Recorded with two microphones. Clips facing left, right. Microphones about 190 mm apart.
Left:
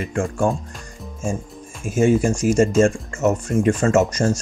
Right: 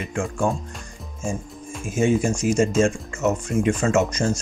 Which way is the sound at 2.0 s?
45° left (ahead or behind).